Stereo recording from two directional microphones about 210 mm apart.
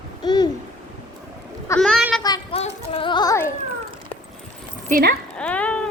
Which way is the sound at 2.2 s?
20° left (ahead or behind).